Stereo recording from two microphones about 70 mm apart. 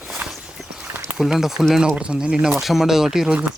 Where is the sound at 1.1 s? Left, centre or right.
Centre.